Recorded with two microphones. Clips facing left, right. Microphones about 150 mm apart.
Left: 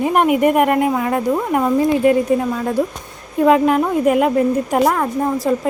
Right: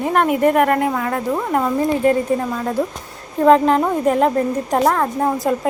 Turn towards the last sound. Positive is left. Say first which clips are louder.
# left 1 dB
turn(degrees=5)  # may be behind; listen again after turning